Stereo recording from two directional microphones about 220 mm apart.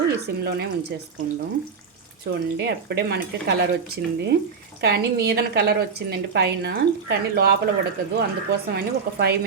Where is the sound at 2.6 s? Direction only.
50° right (ahead or behind).